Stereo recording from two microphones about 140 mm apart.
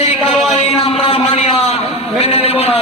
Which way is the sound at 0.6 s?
45° left (ahead or behind).